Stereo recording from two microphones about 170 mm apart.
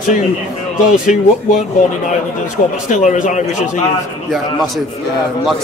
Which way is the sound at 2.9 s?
45° left (ahead or behind).